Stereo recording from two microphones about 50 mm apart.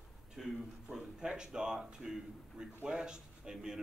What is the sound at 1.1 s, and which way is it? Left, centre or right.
A man's voice, centre.